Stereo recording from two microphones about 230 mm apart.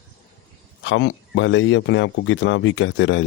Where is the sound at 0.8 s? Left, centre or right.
Left.